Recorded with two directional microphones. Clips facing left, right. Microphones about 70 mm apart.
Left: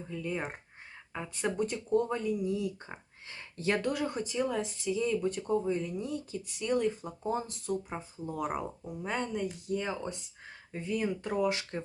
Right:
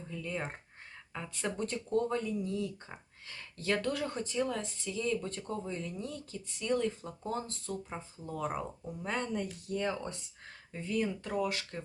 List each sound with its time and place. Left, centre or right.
0.1 s speech: centre
9.0 s speech: centre; by 11.8 s left